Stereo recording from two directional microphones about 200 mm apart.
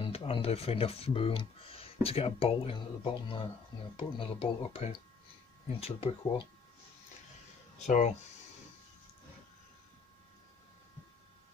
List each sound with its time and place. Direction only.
0.0 s speech: 25° left (ahead or behind)
7.8 s speech: 35° left (ahead or behind)